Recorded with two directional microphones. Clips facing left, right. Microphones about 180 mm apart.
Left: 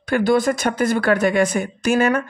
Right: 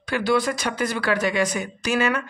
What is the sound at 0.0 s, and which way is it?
A woman's voice, 50° left (ahead or behind).